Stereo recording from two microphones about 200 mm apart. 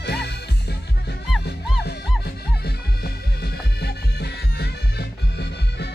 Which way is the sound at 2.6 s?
50° left (ahead or behind).